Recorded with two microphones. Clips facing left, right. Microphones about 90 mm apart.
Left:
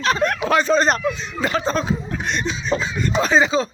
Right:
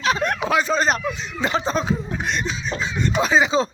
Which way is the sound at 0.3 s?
10° right (ahead or behind).